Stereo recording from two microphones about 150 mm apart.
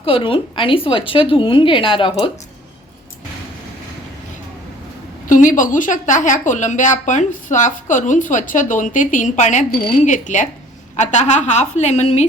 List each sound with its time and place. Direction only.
0.0 s a woman's voice: 35° left (ahead or behind)
5.3 s a woman's voice: 60° left (ahead or behind)